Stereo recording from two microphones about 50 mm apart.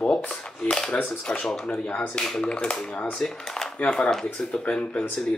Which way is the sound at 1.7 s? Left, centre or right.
Left.